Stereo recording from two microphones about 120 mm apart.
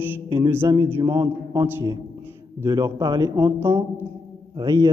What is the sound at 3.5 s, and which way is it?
Speech, 20° right (ahead or behind).